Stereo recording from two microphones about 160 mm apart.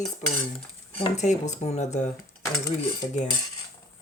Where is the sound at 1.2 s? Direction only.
50° left (ahead or behind).